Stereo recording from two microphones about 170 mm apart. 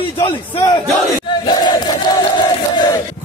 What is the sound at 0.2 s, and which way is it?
Speech, 20° left (ahead or behind).